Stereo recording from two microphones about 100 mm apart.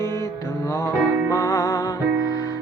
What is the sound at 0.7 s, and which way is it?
Music, 35° left (ahead or behind).